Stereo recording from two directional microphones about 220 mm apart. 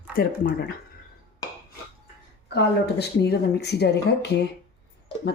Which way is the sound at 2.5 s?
50° left (ahead or behind).